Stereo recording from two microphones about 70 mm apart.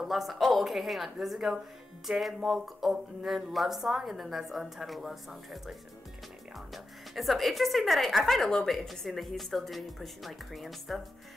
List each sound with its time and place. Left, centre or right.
0.0 s a woman's voice: centre